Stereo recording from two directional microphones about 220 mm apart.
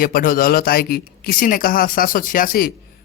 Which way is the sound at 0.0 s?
40° left (ahead or behind).